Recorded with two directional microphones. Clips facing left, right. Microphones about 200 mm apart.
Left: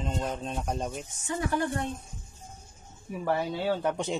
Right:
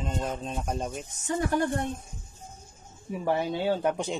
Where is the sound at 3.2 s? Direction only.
15° right (ahead or behind).